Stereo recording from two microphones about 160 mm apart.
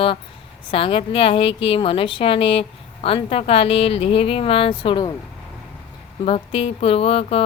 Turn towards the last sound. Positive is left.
turn(degrees=40)  # may be behind; listen again after turning